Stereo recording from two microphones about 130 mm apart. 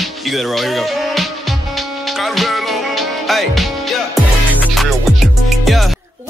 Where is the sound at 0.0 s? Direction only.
Centre (ahead or behind).